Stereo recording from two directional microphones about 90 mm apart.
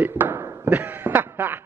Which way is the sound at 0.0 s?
20° right (ahead or behind).